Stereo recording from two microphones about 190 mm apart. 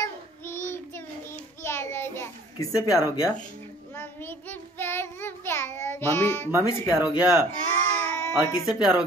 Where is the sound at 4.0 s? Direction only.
10° left (ahead or behind).